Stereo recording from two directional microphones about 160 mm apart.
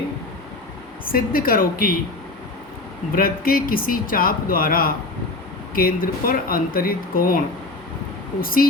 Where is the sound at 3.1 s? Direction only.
65° left (ahead or behind).